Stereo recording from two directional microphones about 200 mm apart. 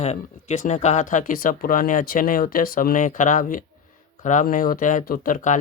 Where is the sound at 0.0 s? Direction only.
35° left (ahead or behind).